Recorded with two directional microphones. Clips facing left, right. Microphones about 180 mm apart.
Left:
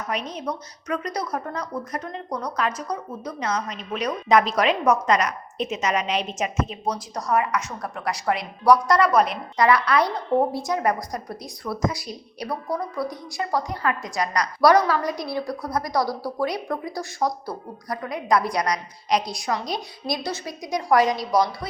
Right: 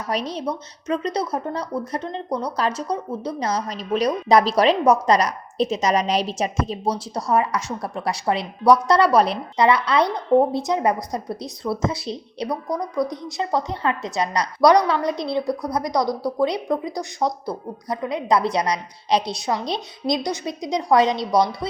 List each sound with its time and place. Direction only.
0.1 s a woman's voice: 35° right (ahead or behind)